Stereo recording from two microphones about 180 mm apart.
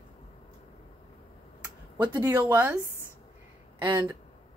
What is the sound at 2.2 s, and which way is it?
Speech, 10° right (ahead or behind).